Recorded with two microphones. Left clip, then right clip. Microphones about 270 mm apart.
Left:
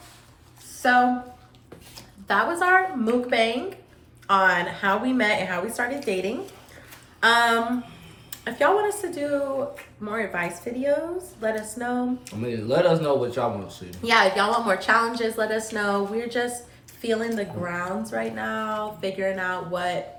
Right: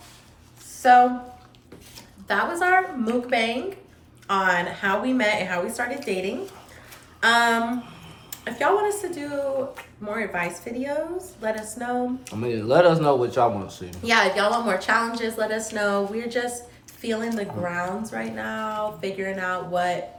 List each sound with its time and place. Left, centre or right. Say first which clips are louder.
0.8 s speech: right 4 dB; centre
12.2 s a man's voice: right 3 dB; centre
13.9 s speech: left 1 dB; centre